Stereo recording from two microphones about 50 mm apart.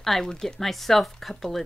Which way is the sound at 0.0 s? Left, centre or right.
Centre.